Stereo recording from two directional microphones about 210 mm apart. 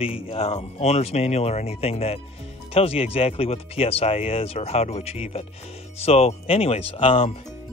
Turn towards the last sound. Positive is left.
turn(degrees=25)  # may be behind; listen again after turning